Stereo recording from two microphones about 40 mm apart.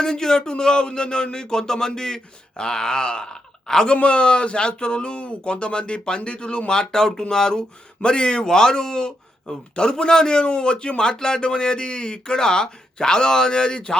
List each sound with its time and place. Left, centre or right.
0.0 s speech: centre
3.9 s a man's voice: left